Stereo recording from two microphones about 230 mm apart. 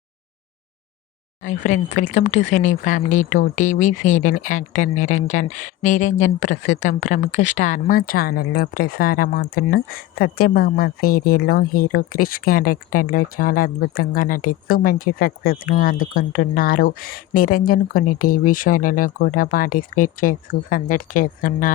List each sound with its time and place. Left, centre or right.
1.5 s speech: left